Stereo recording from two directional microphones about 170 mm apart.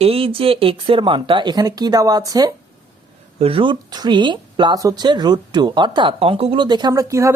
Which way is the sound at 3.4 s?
30° right (ahead or behind).